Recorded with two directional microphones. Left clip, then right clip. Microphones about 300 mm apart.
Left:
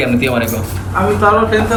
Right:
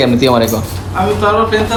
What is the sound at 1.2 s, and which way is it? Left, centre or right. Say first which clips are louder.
Speech: left 1 dB; centre.